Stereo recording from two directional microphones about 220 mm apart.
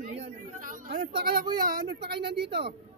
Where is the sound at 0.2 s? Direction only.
40° right (ahead or behind).